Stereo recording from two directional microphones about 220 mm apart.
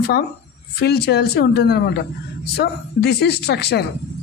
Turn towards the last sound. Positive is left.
turn(degrees=50)  # may be behind; listen again after turning